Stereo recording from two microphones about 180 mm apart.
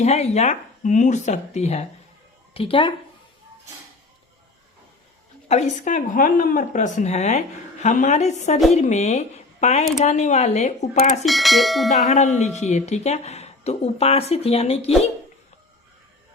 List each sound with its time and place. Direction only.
0.0 s speech: 35° left (ahead or behind)
5.5 s speech: 40° left (ahead or behind)
11.3 s speech: centre (ahead or behind)
12.0 s speech: 40° left (ahead or behind)